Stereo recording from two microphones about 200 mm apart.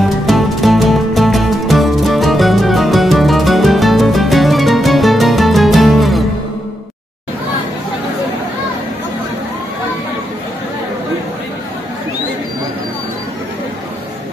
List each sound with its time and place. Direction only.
0.3 s music: centre (ahead or behind)